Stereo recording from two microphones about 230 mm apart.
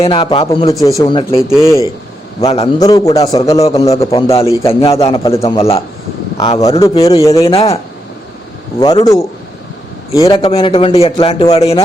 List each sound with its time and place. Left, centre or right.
0.0 s a man's voice: left
2.4 s a man's voice: left
6.6 s a man's voice: centre
8.8 s a man's voice: centre
10.4 s a man's voice: left